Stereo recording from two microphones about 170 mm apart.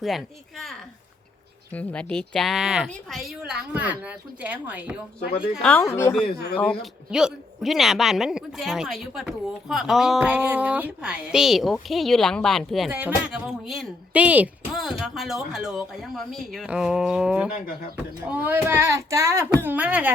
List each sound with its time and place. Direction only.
0.0 s speech: centre (ahead or behind)
1.7 s speech: 10° left (ahead or behind); by 4.9 s 10° right (ahead or behind)
5.5 s speech: 5° left (ahead or behind)
6.2 s speech: 70° left (ahead or behind)
7.1 s speech: 5° right (ahead or behind)
12.9 s speech: 10° right (ahead or behind)